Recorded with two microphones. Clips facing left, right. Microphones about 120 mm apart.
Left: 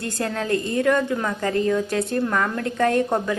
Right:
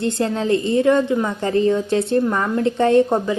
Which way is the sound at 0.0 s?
25° right (ahead or behind).